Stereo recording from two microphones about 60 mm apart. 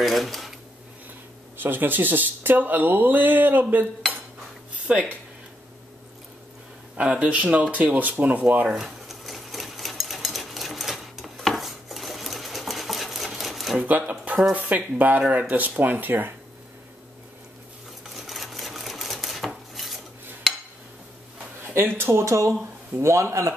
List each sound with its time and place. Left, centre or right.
0.0 s dishes: centre
1.6 s speech: right
4.8 s speech: centre
7.0 s speech: right
8.7 s sewing machine: centre
13.7 s speech: right
18.1 s sewing machine: centre
21.7 s speech: right
22.2 s speech: right